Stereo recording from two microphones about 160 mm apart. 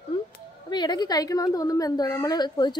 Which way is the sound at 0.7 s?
25° left (ahead or behind).